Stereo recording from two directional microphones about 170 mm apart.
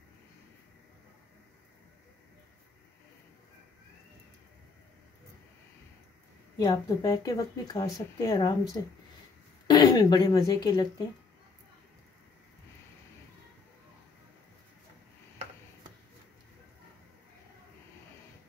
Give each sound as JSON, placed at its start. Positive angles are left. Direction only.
{"t": 6.6, "sound": "speech", "side_deg": 20}